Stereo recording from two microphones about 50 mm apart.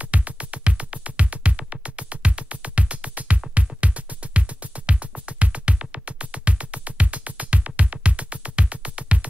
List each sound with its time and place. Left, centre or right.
0.0 s music: right